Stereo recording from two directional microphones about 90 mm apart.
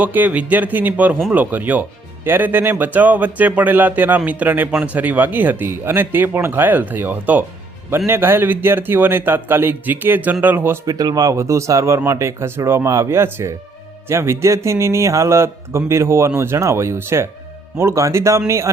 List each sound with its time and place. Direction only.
0.0 s speech: 20° right (ahead or behind)
10.8 s speech: 40° right (ahead or behind)